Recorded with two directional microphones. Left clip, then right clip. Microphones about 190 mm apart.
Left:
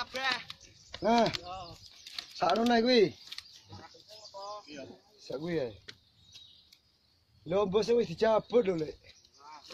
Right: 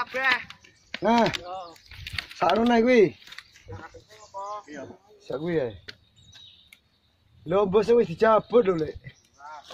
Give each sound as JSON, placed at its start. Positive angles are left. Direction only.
{"t": 0.0, "sound": "speech", "side_deg": 50}
{"t": 0.9, "sound": "speech", "side_deg": -20}
{"t": 1.4, "sound": "a sound", "side_deg": 55}
{"t": 2.3, "sound": "speech", "side_deg": -15}
{"t": 5.3, "sound": "speech", "side_deg": -25}
{"t": 7.4, "sound": "speech", "side_deg": -25}